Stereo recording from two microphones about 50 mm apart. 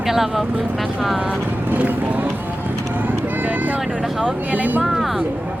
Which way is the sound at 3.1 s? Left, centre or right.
Right.